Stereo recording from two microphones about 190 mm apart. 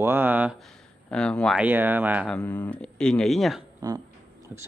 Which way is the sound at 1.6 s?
10° right (ahead or behind).